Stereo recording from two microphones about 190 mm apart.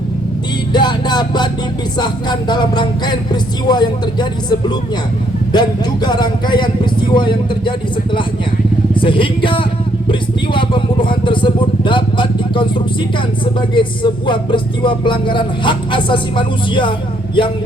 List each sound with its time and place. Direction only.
0.7 s music: 25° left (ahead or behind)
2.0 s speech: 25° left (ahead or behind)
9.0 s speech: 25° left (ahead or behind)